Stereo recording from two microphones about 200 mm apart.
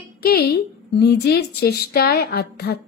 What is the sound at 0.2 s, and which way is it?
A woman's voice, 50° left (ahead or behind).